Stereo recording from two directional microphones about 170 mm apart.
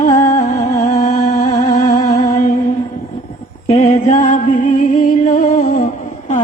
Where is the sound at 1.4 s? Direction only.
45° left (ahead or behind).